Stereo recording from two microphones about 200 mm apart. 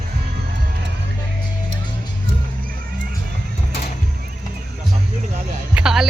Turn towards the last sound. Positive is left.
turn(degrees=-5)  # may be behind; listen again after turning